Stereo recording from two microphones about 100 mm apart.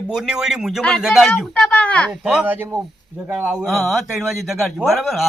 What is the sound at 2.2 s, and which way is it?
A man's voice, 10° right (ahead or behind).